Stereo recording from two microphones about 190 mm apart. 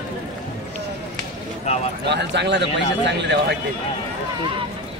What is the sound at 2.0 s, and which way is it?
A man's voice, 65° right (ahead or behind).